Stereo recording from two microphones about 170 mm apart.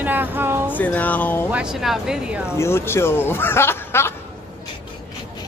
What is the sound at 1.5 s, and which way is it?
Speech, 5° right (ahead or behind).